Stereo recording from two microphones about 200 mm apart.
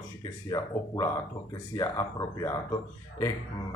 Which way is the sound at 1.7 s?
20° left (ahead or behind).